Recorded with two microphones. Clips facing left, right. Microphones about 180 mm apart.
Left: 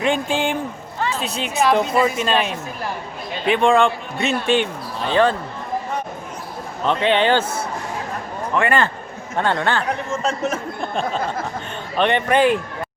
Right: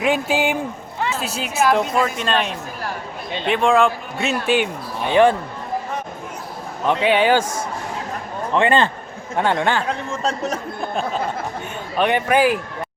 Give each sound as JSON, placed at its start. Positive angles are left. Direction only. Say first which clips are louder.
{"t": 0.0, "sound": "speech", "louder": "right 1 dB", "side_deg": -5}
{"t": 6.8, "sound": "a man's voice", "louder": "right 1 dB", "side_deg": -10}
{"t": 8.5, "sound": "a man's voice", "louder": "right 2 dB", "side_deg": -20}
{"t": 11.9, "sound": "a man's voice", "louder": "even", "side_deg": -5}